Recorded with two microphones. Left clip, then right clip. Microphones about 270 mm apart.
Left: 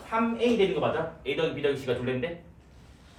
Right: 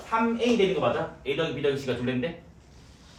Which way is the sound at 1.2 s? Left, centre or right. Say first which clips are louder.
Right 1 dB; centre.